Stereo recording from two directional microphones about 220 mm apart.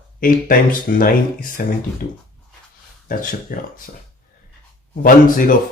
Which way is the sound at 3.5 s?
40° left (ahead or behind).